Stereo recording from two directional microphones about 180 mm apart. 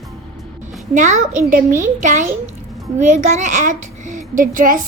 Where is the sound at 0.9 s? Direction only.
45° right (ahead or behind).